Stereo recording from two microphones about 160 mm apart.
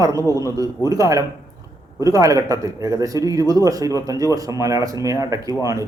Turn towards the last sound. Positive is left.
turn(degrees=-20)  # may be behind; listen again after turning